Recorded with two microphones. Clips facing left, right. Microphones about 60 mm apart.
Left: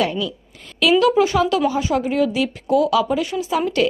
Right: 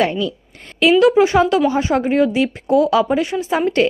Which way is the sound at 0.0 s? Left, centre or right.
Right.